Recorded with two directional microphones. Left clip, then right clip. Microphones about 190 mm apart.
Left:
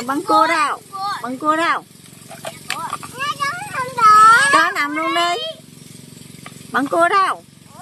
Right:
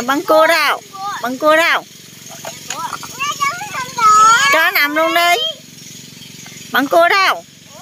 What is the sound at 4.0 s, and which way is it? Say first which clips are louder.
Cat: even; 10° left (ahead or behind).